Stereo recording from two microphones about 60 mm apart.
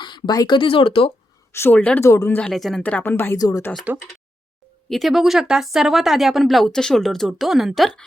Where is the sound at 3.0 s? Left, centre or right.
Left.